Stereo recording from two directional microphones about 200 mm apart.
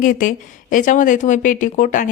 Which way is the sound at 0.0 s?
40° left (ahead or behind).